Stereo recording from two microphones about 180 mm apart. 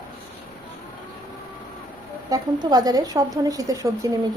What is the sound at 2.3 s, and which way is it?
A woman's voice, 25° right (ahead or behind).